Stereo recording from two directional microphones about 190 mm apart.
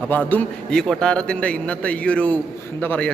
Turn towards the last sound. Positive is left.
turn(degrees=10)  # may be behind; listen again after turning